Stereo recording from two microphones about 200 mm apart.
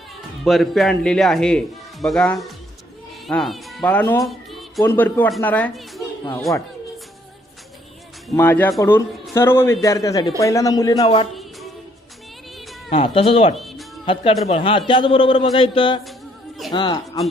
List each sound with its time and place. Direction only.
0.4 s a man's voice: centre (ahead or behind)
4.2 s music: centre (ahead or behind)
4.8 s speech: 10° left (ahead or behind)
8.4 s speech: 10° left (ahead or behind); by 11.3 s 25° left (ahead or behind)
12.9 s a man's voice: 30° left (ahead or behind)
13.6 s music: centre (ahead or behind)
14.0 s a man's voice: 25° left (ahead or behind)